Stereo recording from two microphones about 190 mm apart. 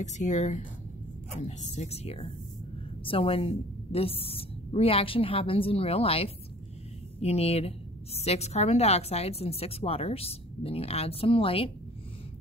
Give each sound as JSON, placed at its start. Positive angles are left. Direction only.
{"t": 0.0, "sound": "a woman's voice", "side_deg": 40}